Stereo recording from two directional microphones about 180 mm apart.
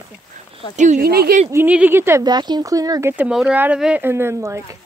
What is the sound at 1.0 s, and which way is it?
Speech, 60° right (ahead or behind).